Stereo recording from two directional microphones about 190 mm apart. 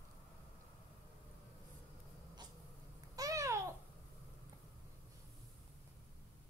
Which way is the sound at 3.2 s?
15° right (ahead or behind).